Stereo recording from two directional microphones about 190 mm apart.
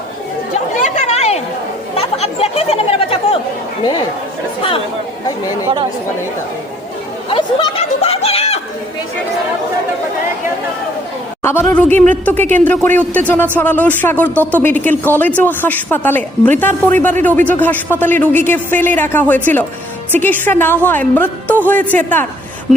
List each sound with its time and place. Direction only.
0.8 s chatter: 40° left (ahead or behind)
7.3 s chatter: 30° left (ahead or behind)
11.4 s speech: 10° left (ahead or behind)